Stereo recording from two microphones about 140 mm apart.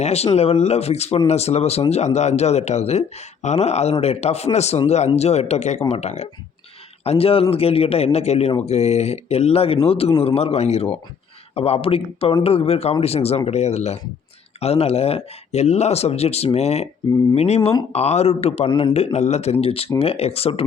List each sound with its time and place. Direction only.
0.0 s speech: 50° left (ahead or behind)
18.7 s a man's voice: 35° left (ahead or behind)
18.9 s speech: 50° left (ahead or behind)